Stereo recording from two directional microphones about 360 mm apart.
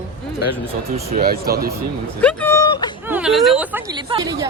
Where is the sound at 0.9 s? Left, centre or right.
Right.